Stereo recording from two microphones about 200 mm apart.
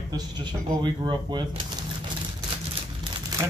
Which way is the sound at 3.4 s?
20° right (ahead or behind).